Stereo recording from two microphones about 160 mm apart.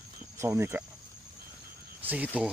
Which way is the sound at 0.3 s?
15° right (ahead or behind).